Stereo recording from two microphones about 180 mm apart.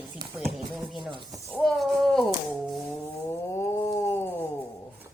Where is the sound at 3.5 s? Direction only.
15° left (ahead or behind).